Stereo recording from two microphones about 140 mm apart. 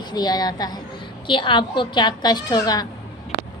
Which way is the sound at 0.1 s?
30° left (ahead or behind).